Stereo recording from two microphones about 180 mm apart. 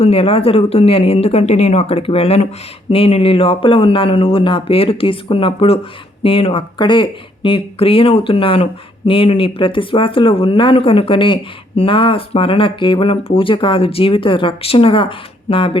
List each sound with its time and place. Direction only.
0.0 s speech: 30° left (ahead or behind)